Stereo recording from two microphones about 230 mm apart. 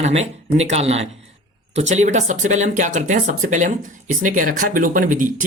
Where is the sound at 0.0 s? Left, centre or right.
Right.